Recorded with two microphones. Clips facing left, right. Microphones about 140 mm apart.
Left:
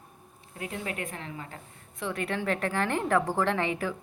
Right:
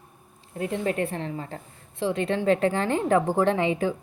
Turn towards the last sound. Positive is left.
turn(degrees=-20)  # may be behind; listen again after turning